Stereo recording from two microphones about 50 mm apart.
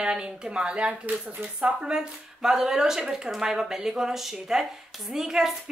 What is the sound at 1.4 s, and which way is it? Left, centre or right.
Speech, right.